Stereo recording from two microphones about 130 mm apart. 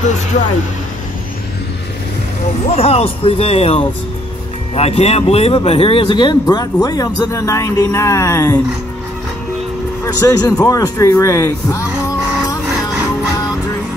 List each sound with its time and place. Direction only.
2.7 s speech: 50° left (ahead or behind); by 8.5 s 20° left (ahead or behind)
10.0 s speech: 30° left (ahead or behind)